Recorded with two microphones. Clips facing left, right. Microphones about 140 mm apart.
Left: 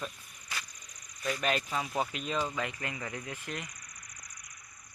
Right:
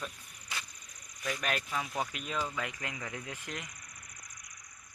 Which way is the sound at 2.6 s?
15° right (ahead or behind).